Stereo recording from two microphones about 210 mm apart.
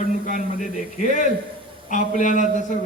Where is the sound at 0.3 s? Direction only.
40° left (ahead or behind).